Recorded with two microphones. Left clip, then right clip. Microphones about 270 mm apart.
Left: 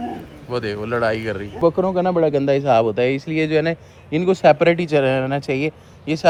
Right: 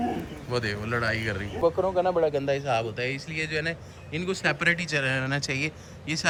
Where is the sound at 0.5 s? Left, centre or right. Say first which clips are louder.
Left 6 dB; centre.